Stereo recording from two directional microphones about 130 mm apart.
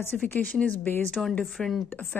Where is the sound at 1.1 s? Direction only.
Centre (ahead or behind).